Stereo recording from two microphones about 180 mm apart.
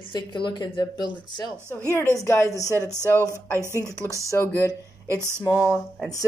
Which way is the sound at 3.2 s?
15° right (ahead or behind).